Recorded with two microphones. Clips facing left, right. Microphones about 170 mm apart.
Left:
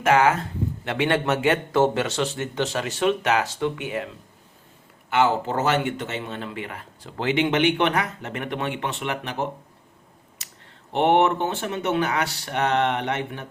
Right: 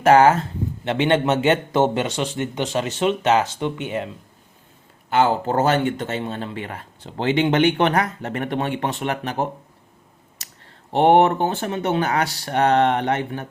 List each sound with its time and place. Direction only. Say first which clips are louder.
0.0 s speech: right 5 dB; 35° right (ahead or behind)
0.9 s a man's voice: right 4 dB; 25° right (ahead or behind)
5.0 s speech: right 2 dB; 35° right (ahead or behind)
10.4 s clicking: right 3 dB; 40° right (ahead or behind)
10.9 s speech: right 4 dB; 35° right (ahead or behind)